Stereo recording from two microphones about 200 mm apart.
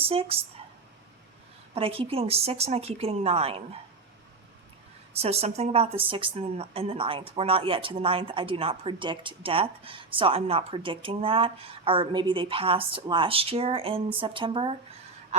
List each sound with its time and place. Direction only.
0.0 s speech: 30° right (ahead or behind)
1.7 s speech: 30° right (ahead or behind)
5.1 s speech: 30° right (ahead or behind)